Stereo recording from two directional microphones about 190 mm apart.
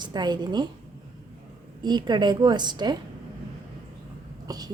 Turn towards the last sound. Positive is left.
turn(degrees=-20)  # may be behind; listen again after turning